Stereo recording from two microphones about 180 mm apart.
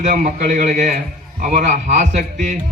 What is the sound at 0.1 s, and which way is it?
A man's voice, 45° right (ahead or behind).